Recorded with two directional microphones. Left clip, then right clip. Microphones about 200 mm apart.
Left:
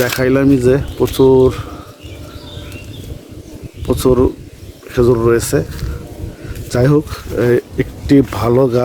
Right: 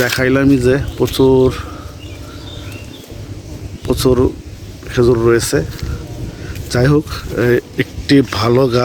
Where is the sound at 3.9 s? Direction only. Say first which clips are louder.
Left 1 dB; centre (ahead or behind).